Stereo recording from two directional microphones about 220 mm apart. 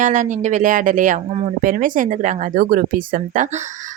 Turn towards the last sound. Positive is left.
turn(degrees=-35)  # may be behind; listen again after turning